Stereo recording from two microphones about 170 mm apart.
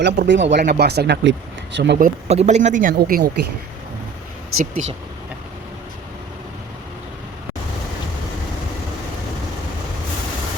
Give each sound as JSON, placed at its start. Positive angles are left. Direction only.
{"t": 0.0, "sound": "speech", "side_deg": -90}
{"t": 0.5, "sound": "speech", "side_deg": -60}
{"t": 2.0, "sound": "speech", "side_deg": -55}
{"t": 2.3, "sound": "speech", "side_deg": -40}
{"t": 2.9, "sound": "speech", "side_deg": -65}
{"t": 4.6, "sound": "speech", "side_deg": -45}